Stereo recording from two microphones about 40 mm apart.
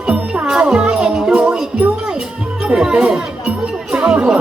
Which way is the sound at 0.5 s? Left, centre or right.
Centre.